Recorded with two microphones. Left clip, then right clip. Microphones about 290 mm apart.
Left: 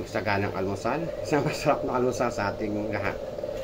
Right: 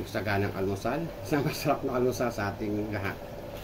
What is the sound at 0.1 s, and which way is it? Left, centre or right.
Speech, centre.